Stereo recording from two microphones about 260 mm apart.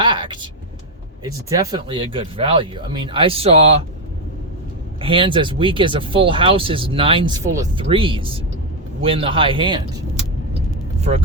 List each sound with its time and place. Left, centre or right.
0.0 s vehicle: centre
1.2 s speech: centre
4.9 s speech: centre